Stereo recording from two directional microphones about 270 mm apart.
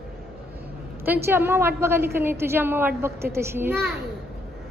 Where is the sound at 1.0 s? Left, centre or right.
Centre.